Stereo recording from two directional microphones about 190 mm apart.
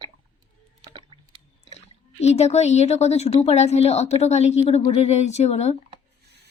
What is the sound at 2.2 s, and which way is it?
A woman's voice, 35° left (ahead or behind).